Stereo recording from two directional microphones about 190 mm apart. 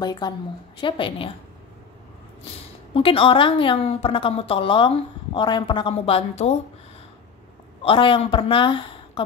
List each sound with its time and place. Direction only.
0.0 s a woman's voice: 20° left (ahead or behind)
2.9 s a woman's voice: 30° left (ahead or behind)
7.8 s a woman's voice: 25° left (ahead or behind)